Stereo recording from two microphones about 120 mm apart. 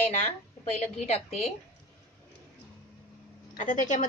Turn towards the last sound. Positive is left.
turn(degrees=90)